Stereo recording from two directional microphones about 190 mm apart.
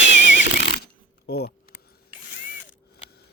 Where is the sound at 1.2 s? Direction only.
55° left (ahead or behind).